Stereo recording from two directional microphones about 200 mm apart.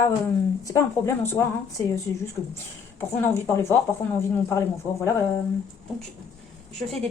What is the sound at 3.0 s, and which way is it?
Speech, 15° left (ahead or behind).